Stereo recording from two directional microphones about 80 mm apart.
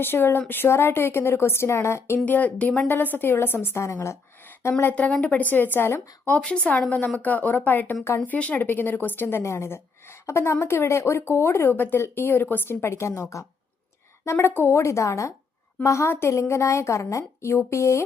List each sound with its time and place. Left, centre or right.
0.0 s a woman's voice: left
2.2 s a woman's voice: centre; by 4.7 s left
4.9 s a woman's voice: centre
6.3 s a woman's voice: centre; by 13.2 s left
14.3 s a woman's voice: left